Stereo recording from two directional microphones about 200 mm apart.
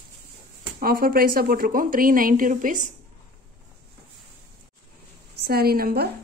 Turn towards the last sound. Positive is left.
turn(degrees=-50)  # may be behind; listen again after turning